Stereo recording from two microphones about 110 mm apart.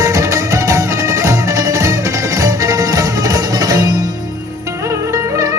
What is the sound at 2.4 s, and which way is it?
Music, 30° right (ahead or behind).